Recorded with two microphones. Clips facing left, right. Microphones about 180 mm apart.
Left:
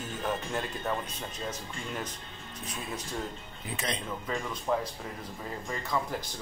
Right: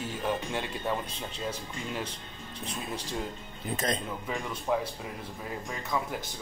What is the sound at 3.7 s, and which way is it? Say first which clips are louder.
Speech: right 4 dB; 45° right (ahead or behind).